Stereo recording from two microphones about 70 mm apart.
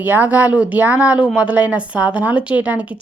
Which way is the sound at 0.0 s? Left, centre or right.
Right.